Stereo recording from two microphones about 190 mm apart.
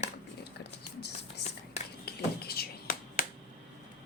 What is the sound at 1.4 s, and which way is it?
Whispering, 60° left (ahead or behind).